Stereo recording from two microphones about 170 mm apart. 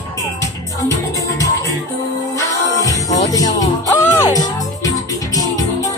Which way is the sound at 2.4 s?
20° left (ahead or behind).